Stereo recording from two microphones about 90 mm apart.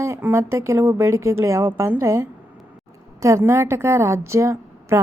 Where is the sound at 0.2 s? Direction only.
25° right (ahead or behind).